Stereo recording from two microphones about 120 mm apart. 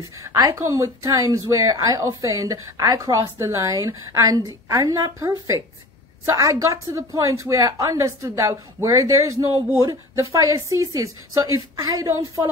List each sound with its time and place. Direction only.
0.2 s a woman's voice: 25° right (ahead or behind)